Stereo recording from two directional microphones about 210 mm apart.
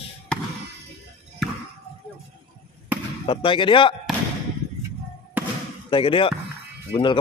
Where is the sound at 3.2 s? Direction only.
25° left (ahead or behind).